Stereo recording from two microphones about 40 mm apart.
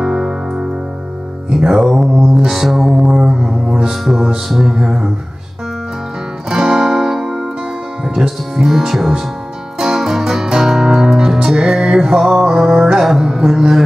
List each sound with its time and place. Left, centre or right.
0.0 s music: centre
1.5 s mantra: centre
4.0 s music: centre
6.5 s music: centre
8.1 s speech: centre
9.8 s music: centre